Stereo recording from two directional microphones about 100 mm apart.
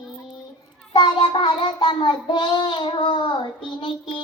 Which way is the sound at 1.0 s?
55° left (ahead or behind).